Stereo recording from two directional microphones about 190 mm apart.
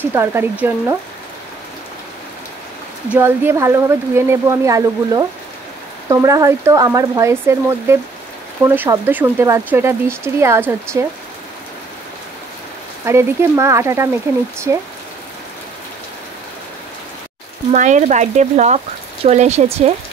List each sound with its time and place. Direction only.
0.0 s speech: 10° right (ahead or behind)
3.1 s speech: 10° right (ahead or behind)
13.0 s speech: 15° right (ahead or behind)
17.7 s speech: 40° right (ahead or behind)